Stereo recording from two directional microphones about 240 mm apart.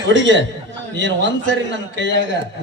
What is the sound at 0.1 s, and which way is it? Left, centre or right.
A man's voice, right.